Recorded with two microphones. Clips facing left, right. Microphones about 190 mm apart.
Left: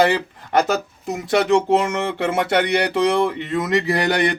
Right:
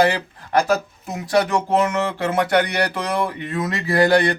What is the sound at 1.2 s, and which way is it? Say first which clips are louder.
Speech: left 2 dB; 25° left (ahead or behind).